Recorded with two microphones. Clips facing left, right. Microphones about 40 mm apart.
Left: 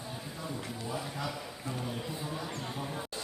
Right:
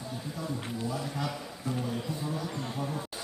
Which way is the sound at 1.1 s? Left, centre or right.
Centre.